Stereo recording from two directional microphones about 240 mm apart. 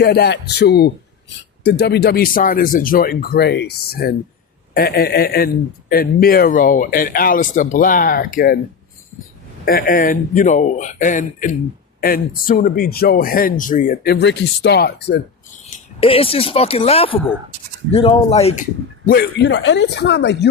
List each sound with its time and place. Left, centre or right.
0.0 s a man's voice: left
9.6 s a man's voice: left
15.6 s speech: left